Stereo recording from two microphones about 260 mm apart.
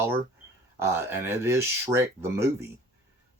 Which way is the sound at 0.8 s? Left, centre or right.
Centre.